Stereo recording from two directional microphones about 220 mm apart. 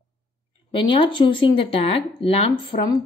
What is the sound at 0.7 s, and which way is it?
Speech, 20° left (ahead or behind).